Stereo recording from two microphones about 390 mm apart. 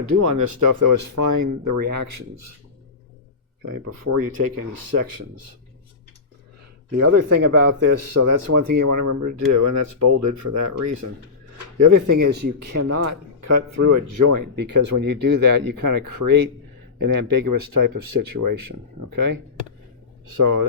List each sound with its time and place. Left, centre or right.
0.0 s speech: right
4.2 s speech: right
4.7 s speech: right
7.0 s speech: right